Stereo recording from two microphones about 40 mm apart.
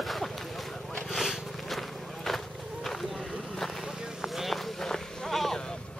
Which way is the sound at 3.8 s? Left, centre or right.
Centre.